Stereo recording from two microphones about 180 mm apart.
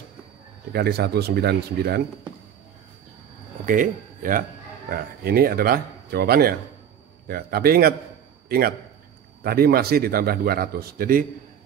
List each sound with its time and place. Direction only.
0.7 s speech: 65° right (ahead or behind)
3.6 s a man's voice: 50° right (ahead or behind)